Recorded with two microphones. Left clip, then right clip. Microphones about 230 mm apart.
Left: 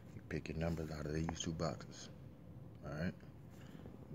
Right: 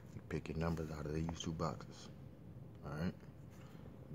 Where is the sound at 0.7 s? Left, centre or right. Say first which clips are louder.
Even; centre.